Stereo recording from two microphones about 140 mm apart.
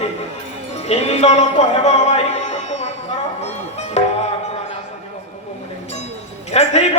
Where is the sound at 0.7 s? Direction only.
50° left (ahead or behind).